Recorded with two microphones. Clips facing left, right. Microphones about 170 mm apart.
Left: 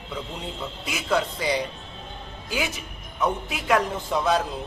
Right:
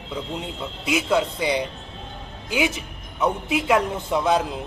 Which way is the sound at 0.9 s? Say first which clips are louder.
Right 4 dB; 15° right (ahead or behind).